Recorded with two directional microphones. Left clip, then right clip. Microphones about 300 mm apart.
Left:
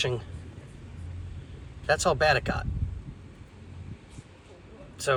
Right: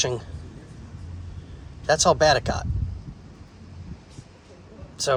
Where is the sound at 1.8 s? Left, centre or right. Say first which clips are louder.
Right 5 dB; centre.